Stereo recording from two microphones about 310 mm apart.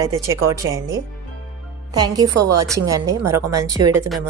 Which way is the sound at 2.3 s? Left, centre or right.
Right.